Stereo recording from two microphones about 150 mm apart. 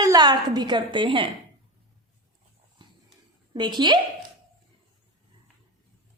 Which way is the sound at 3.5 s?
30° right (ahead or behind).